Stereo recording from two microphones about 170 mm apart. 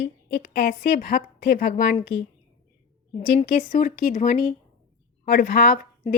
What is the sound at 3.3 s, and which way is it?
Speech, 50° left (ahead or behind).